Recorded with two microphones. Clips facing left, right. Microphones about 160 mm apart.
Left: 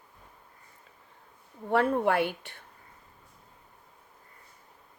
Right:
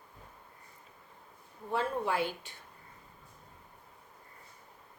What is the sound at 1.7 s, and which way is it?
Speech, 60° left (ahead or behind).